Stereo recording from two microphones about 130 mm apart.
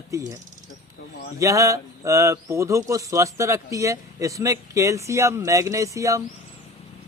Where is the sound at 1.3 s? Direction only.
25° right (ahead or behind).